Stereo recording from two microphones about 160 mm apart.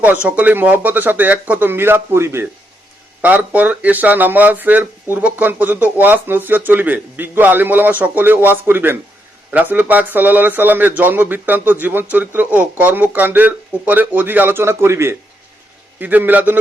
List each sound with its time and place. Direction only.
0.0 s speech: 10° right (ahead or behind)